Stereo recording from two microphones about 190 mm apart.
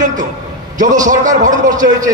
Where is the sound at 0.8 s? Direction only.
40° right (ahead or behind).